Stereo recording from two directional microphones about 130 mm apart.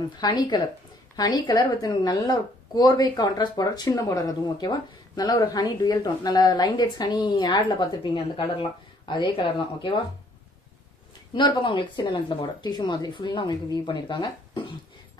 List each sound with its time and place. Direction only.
0.2 s a woman's voice: 35° left (ahead or behind)
11.3 s a woman's voice: 40° left (ahead or behind)